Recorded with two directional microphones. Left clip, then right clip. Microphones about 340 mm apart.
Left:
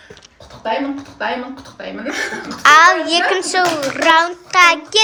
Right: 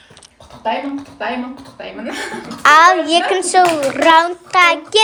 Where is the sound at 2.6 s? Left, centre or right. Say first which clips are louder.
Even; centre.